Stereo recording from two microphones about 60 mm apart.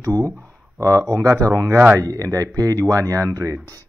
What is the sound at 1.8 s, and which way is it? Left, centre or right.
Speech, right.